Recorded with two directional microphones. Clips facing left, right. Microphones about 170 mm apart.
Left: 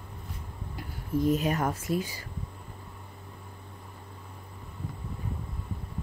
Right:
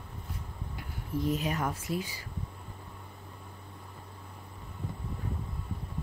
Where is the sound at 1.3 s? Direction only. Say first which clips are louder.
Left 4 dB; 50° left (ahead or behind).